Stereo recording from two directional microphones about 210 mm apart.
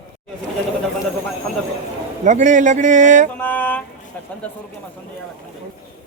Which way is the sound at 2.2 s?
35° right (ahead or behind).